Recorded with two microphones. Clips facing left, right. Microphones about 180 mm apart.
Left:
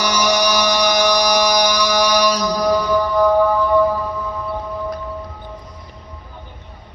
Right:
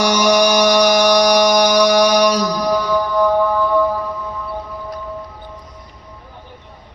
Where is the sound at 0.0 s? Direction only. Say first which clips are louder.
Right 4 dB; 50° right (ahead or behind).